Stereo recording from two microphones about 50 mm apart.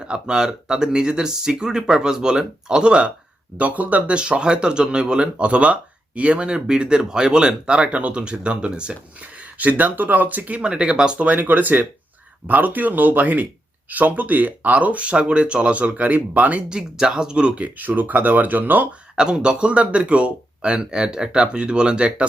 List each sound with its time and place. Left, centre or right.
0.0 s speech: centre
3.6 s speech: right
9.6 s speech: right
10.6 s speech: centre
11.3 s speech: right
16.6 s speech: centre; by 18.9 s right
19.1 s speech: centre